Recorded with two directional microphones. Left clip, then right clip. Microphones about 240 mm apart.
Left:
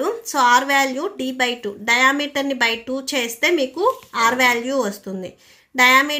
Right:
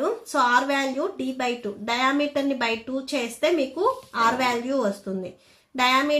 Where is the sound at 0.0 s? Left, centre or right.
Left.